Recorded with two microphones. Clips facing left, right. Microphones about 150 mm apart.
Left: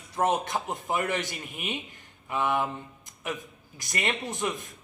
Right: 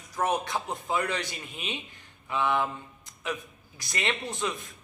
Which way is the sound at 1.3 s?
15° left (ahead or behind).